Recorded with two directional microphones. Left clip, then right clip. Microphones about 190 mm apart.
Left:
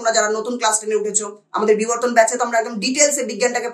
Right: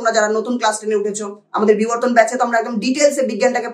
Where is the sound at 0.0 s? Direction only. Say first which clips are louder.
Right 2 dB; 15° left (ahead or behind).